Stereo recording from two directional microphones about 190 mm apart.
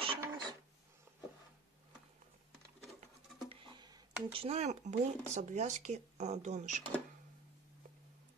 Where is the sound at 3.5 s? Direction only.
30° right (ahead or behind).